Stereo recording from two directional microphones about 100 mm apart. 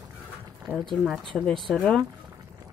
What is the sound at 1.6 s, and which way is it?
Speech, 5° left (ahead or behind).